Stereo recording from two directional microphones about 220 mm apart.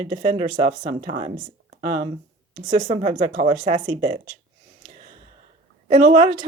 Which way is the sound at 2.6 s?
20° right (ahead or behind).